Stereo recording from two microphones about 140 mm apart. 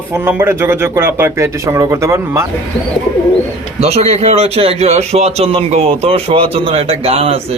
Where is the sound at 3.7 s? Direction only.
45° right (ahead or behind).